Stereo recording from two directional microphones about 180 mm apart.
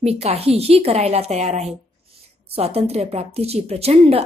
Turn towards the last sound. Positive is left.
turn(degrees=-35)  # may be behind; listen again after turning